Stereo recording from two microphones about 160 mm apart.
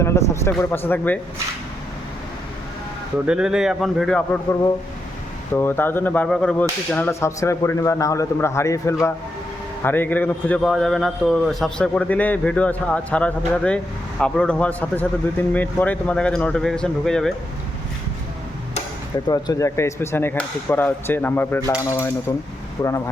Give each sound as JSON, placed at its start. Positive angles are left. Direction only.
{"t": 0.0, "sound": "a man's voice", "side_deg": 15}
{"t": 3.2, "sound": "a man's voice", "side_deg": -5}
{"t": 5.5, "sound": "a man's voice", "side_deg": 15}
{"t": 19.3, "sound": "a man's voice", "side_deg": 20}